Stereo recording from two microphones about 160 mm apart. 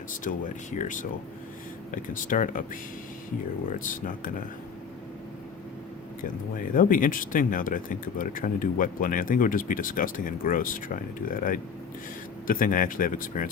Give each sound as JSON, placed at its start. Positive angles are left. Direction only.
{"t": 0.3, "sound": "speech", "side_deg": 55}
{"t": 3.7, "sound": "speech", "side_deg": 55}
{"t": 6.6, "sound": "speech", "side_deg": 60}